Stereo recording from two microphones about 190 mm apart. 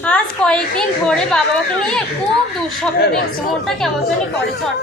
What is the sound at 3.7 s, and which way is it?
Speech, centre (ahead or behind).